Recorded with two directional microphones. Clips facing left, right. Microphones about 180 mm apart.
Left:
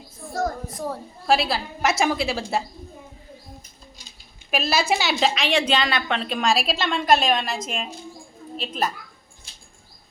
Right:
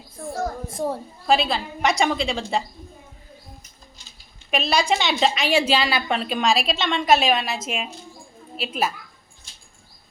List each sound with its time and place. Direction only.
0.7 s a woman's voice: 25° right (ahead or behind)
1.3 s a woman's voice: 5° left (ahead or behind)
4.5 s a woman's voice: 5° left (ahead or behind)